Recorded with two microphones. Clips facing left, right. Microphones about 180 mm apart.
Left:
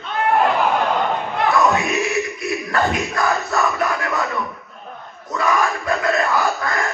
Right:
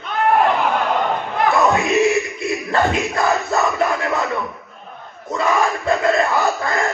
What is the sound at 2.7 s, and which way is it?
Battle cry, 25° right (ahead or behind).